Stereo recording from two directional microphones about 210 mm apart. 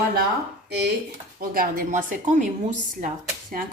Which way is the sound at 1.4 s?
40° right (ahead or behind).